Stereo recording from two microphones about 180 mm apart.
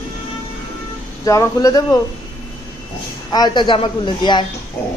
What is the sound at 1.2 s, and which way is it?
Speech, 20° left (ahead or behind).